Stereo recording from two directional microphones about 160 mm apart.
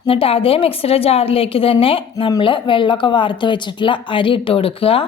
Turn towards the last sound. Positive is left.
turn(degrees=35)  # may be behind; listen again after turning